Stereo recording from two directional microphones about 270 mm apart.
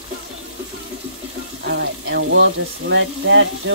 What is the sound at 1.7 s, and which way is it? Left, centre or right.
Speech, right.